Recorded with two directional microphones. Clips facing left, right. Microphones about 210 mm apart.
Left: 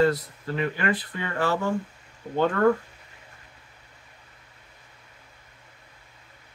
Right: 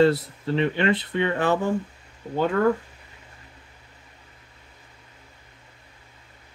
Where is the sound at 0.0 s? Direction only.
25° right (ahead or behind).